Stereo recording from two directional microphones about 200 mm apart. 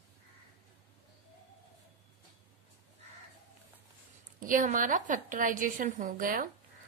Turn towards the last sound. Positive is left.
turn(degrees=-45)  # may be behind; listen again after turning